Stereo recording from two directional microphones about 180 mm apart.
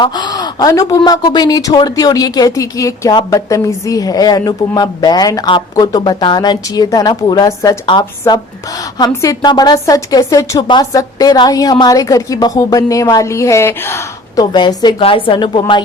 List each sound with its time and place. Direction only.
0.0 s speech: 25° left (ahead or behind)